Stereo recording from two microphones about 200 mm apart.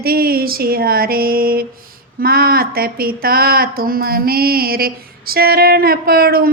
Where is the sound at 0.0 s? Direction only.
50° right (ahead or behind).